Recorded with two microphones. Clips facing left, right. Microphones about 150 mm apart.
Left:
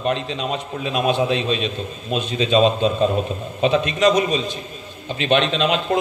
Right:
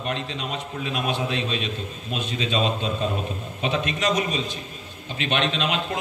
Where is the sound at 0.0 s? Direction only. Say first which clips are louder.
Left 7 dB; 30° left (ahead or behind).